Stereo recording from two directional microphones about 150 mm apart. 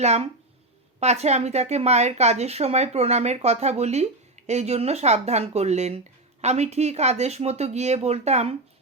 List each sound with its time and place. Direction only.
0.0 s speech: 45° right (ahead or behind)